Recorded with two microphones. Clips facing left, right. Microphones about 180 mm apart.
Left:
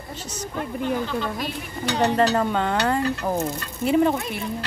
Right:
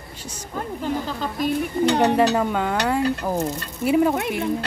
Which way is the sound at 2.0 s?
10° right (ahead or behind).